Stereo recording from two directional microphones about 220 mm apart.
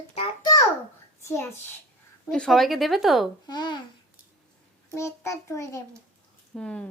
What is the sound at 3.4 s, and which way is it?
Speech, 20° left (ahead or behind).